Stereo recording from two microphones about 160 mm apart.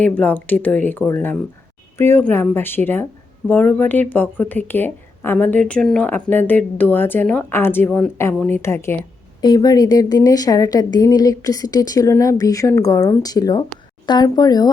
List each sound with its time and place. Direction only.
0.0 s speech: 10° left (ahead or behind)
9.4 s a woman's voice: 30° left (ahead or behind)